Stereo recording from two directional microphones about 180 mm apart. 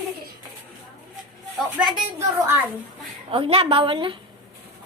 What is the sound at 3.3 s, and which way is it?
Speech, 30° right (ahead or behind).